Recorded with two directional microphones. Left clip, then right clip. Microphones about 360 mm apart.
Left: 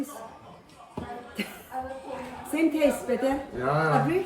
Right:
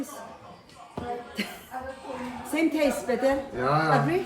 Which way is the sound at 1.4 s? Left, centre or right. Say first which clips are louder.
Left 1 dB; centre.